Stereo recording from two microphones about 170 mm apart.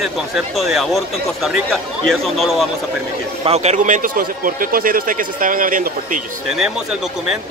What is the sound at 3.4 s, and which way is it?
Speech, 40° right (ahead or behind).